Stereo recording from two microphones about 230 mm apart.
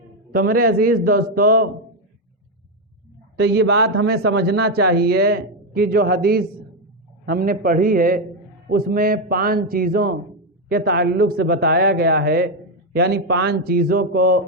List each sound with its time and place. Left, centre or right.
0.3 s speech: right
3.3 s a man's voice: right